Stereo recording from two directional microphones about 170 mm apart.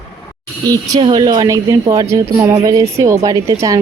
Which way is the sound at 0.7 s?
20° right (ahead or behind).